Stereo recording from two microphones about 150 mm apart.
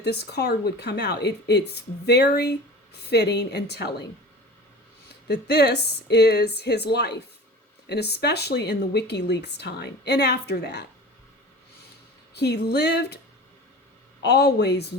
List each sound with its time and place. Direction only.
0.0 s speech: 90° left
5.3 s speech: 90° left
12.3 s speech: 90° left
14.3 s speech: 90° left